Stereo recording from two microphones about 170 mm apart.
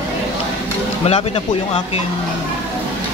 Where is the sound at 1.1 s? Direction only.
35° left (ahead or behind).